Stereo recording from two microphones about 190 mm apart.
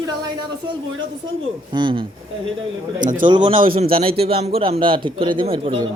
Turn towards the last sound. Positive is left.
turn(degrees=-30)  # may be behind; listen again after turning